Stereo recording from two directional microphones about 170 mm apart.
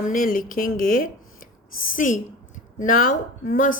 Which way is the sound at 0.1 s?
55° left (ahead or behind).